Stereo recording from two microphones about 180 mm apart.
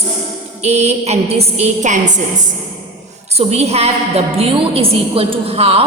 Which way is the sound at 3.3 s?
35° right (ahead or behind).